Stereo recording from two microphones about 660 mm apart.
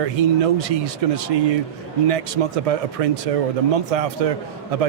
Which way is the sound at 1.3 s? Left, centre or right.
Right.